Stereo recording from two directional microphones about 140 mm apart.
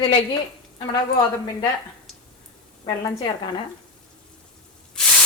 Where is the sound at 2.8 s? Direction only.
30° left (ahead or behind).